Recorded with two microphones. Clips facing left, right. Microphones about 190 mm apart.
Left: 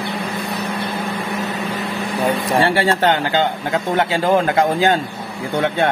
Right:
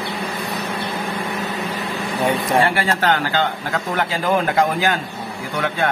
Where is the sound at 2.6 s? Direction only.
30° left (ahead or behind).